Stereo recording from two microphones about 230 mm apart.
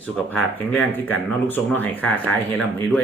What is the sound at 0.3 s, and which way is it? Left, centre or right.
Speech, centre.